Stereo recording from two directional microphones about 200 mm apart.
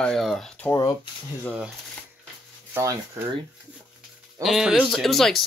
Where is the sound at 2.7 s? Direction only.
15° right (ahead or behind).